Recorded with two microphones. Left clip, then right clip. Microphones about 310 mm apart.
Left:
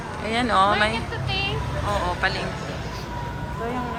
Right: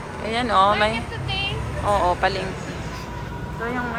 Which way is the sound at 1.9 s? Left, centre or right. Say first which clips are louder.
Right 5 dB; centre.